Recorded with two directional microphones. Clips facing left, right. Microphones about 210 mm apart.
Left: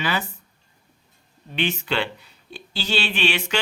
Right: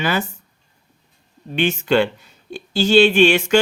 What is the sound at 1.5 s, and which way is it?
Speech, 45° right (ahead or behind).